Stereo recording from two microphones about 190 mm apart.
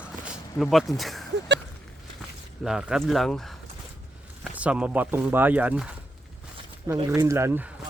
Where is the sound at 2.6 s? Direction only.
Centre (ahead or behind).